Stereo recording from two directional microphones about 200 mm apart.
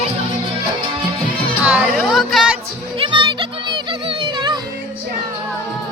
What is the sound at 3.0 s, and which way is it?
Music, 25° right (ahead or behind).